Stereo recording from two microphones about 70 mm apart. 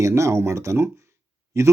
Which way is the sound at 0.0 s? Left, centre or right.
Right.